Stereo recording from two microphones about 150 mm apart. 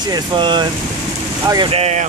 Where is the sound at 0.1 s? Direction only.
30° right (ahead or behind).